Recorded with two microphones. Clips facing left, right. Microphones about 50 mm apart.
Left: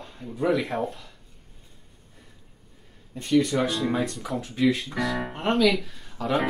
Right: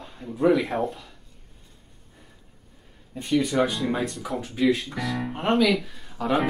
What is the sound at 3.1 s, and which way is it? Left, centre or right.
Speech, centre.